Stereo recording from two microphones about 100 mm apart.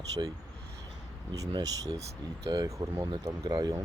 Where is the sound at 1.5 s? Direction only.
40° right (ahead or behind).